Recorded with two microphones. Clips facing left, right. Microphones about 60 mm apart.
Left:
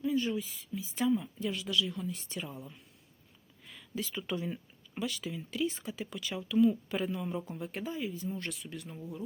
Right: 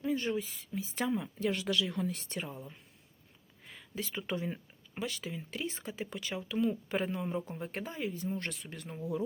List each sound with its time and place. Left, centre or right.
0.0 s speech: right
3.6 s speech: right